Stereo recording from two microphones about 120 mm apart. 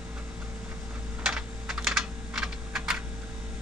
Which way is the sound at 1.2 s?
5° right (ahead or behind).